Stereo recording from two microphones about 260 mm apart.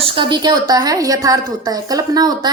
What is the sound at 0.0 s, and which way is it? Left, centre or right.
A woman's voice, centre.